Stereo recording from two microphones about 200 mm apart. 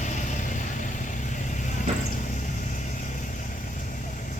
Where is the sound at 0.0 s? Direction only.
40° left (ahead or behind).